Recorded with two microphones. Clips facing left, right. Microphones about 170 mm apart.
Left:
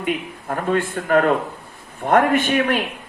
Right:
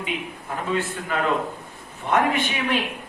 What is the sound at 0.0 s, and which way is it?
A man's voice, 55° left (ahead or behind).